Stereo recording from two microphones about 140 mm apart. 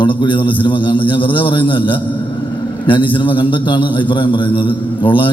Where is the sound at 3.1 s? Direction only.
35° left (ahead or behind).